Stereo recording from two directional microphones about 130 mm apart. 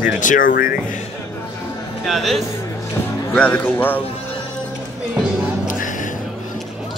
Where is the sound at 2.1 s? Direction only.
Centre (ahead or behind).